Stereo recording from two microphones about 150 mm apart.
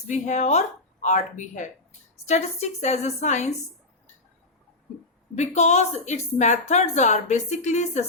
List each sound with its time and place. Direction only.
0.1 s speech: 50° left (ahead or behind)
5.3 s speech: 50° left (ahead or behind)